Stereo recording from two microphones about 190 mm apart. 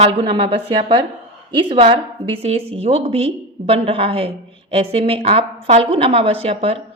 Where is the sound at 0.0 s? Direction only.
25° right (ahead or behind).